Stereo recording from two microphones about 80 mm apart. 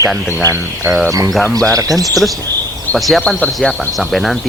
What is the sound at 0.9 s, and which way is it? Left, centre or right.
Speech, right.